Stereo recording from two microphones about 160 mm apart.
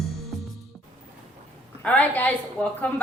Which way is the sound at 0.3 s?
Centre (ahead or behind).